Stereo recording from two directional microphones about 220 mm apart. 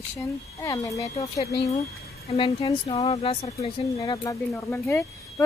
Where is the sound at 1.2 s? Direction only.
30° left (ahead or behind).